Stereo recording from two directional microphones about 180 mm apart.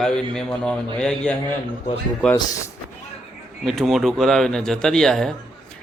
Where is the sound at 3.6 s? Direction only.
Centre (ahead or behind).